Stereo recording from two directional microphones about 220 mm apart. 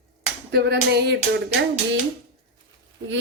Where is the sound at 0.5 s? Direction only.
45° right (ahead or behind).